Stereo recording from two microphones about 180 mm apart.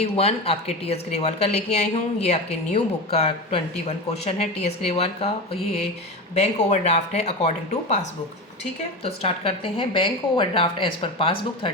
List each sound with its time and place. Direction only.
0.0 s speech: 35° left (ahead or behind)
9.0 s a woman's voice: 35° left (ahead or behind)